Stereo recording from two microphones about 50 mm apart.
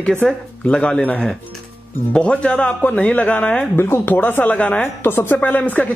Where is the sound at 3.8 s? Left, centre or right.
Left.